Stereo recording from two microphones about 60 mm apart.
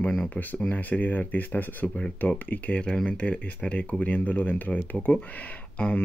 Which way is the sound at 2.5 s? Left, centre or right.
Centre.